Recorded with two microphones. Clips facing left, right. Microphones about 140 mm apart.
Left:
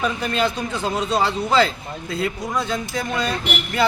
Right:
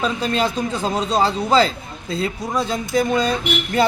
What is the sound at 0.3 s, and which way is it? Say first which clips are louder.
Speech: right 2 dB; 35° right (ahead or behind).